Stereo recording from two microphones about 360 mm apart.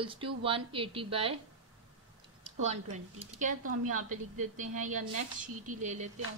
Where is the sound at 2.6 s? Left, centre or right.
Centre.